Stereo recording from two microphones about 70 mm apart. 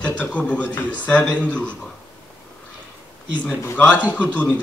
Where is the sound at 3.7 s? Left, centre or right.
Centre.